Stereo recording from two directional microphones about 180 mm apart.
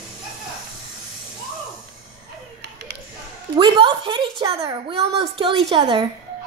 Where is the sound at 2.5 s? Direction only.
65° right (ahead or behind).